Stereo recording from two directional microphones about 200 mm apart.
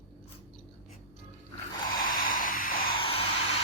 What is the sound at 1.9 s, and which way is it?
Vehicle, 45° left (ahead or behind).